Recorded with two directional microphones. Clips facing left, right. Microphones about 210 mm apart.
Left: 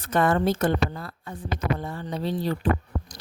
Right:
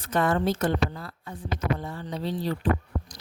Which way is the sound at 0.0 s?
55° left (ahead or behind).